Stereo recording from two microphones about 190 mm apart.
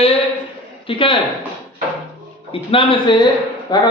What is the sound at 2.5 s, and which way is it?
A man's voice, 30° left (ahead or behind).